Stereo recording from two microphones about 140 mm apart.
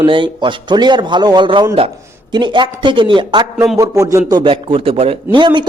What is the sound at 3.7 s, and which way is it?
A man's voice, 20° right (ahead or behind).